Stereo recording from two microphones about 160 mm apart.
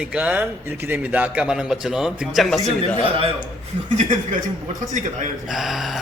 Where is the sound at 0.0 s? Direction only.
5° right (ahead or behind).